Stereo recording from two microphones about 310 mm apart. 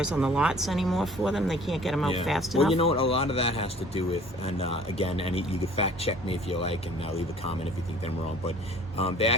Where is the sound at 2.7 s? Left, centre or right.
Centre.